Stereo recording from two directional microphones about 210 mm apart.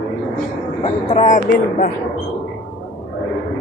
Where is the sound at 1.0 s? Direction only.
35° left (ahead or behind).